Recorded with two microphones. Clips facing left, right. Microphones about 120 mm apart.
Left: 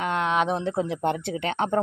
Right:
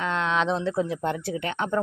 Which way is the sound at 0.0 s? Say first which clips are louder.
Left 1 dB; 10° left (ahead or behind).